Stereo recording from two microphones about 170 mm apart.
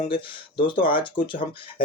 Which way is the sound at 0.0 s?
30° left (ahead or behind).